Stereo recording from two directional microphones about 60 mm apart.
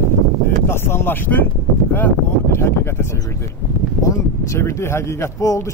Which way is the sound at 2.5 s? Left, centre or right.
Left.